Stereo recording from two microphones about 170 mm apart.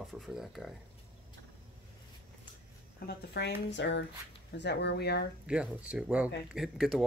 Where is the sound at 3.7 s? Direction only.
90° left.